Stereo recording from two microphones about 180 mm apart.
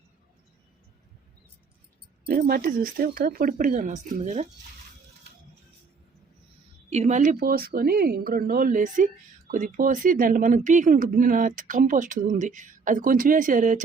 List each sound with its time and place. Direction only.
2.2 s speech: 55° right (ahead or behind); by 4.4 s 40° right (ahead or behind)
6.9 s speech: 40° right (ahead or behind)